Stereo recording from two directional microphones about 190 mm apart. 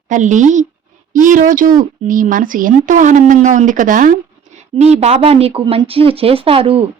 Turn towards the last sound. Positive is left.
turn(degrees=-30)  # may be behind; listen again after turning